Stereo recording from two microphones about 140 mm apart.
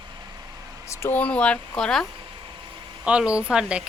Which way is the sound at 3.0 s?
5° right (ahead or behind).